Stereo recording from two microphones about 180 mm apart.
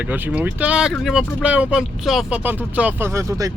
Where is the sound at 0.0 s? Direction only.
10° right (ahead or behind).